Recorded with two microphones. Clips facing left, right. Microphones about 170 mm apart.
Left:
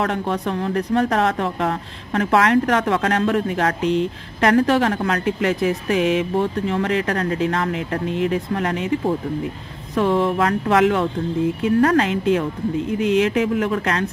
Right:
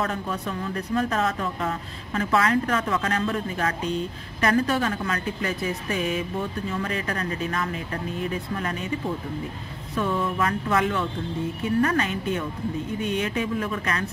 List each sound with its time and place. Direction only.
0.0 s speech: 75° left (ahead or behind)
9.9 s a woman's voice: 85° left